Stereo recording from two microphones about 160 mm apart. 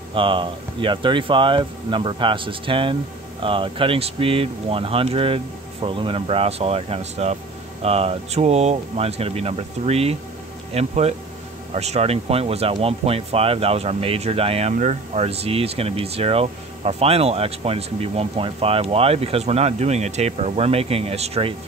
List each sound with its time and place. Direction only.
0.1 s speech: 30° right (ahead or behind)
14.7 s speech: 50° right (ahead or behind)